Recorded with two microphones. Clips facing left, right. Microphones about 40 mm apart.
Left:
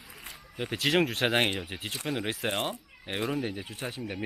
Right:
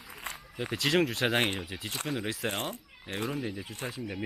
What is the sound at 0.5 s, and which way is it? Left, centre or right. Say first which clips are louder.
Speech: left 1 dB; centre.